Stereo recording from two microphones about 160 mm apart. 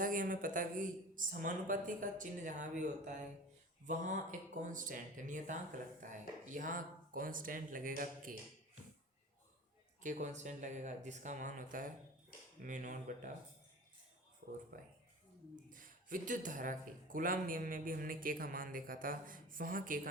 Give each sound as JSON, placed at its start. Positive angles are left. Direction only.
{"t": 0.0, "sound": "speech", "side_deg": -55}
{"t": 10.0, "sound": "speech", "side_deg": -50}
{"t": 14.4, "sound": "speech", "side_deg": -65}
{"t": 15.7, "sound": "speech", "side_deg": -60}